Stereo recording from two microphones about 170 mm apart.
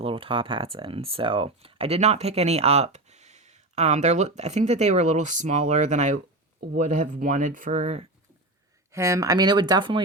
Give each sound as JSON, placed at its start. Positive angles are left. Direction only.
{"t": 0.0, "sound": "speech", "side_deg": -30}
{"t": 8.9, "sound": "speech", "side_deg": -15}